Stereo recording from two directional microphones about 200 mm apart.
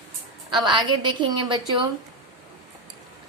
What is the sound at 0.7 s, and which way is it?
Speech, 25° right (ahead or behind).